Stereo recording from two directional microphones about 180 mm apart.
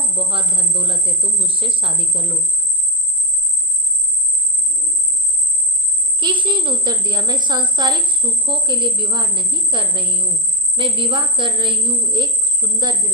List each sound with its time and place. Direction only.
0.0 s a woman's voice: 30° right (ahead or behind)
6.1 s a woman's voice: 25° right (ahead or behind)